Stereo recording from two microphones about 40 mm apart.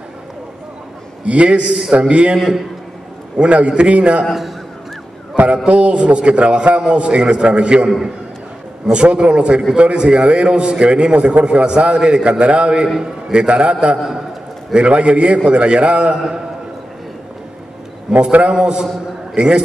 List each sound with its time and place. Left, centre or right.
1.2 s a man's voice: right
2.3 s a man's voice: centre
3.3 s a man's voice: right
5.7 s a man's voice: right
8.9 s a man's voice: right
16.1 s a man's voice: centre
18.5 s a man's voice: centre